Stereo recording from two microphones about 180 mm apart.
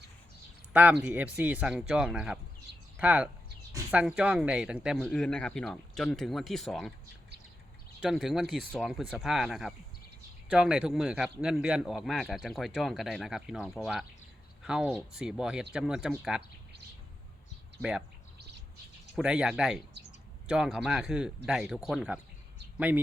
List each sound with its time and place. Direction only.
0.7 s speech: 10° right (ahead or behind)
2.7 s a sound: 70° right (ahead or behind)
3.0 s speech: 5° right (ahead or behind)
3.7 s a sound: 15° right (ahead or behind)
4.0 s a man's voice: 5° right (ahead or behind)
8.0 s a man's voice: centre (ahead or behind)
19.1 s a man's voice: 5° right (ahead or behind)